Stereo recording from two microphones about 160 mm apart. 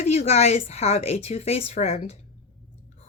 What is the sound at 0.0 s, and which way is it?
A woman's voice, 45° left (ahead or behind).